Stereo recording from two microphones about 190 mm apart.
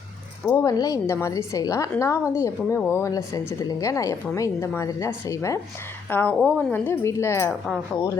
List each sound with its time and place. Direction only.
0.4 s speech: 15° left (ahead or behind)